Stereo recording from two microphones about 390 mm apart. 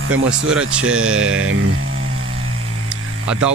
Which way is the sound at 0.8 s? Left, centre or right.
Right.